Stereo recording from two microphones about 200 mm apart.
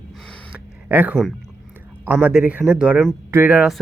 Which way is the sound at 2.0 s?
10° right (ahead or behind).